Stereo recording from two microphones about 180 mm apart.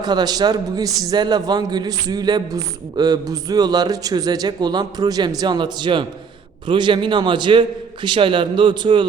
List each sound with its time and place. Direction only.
0.0 s a man's voice: 25° right (ahead or behind)